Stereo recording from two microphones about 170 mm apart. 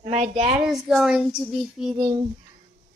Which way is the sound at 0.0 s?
40° right (ahead or behind).